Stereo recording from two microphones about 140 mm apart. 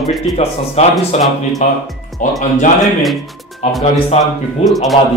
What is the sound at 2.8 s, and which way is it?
Speech, centre (ahead or behind).